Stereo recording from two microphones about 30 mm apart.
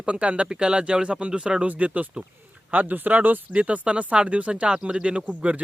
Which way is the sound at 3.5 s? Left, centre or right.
Right.